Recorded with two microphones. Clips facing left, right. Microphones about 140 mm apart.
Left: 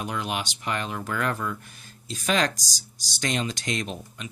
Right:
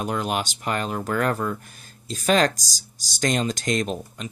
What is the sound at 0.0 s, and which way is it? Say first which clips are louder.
Speech: right 4 dB; 40° right (ahead or behind).